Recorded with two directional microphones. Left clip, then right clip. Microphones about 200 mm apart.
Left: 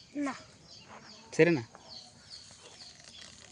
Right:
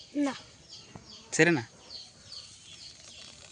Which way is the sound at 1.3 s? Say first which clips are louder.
Right 1 dB; centre (ahead or behind).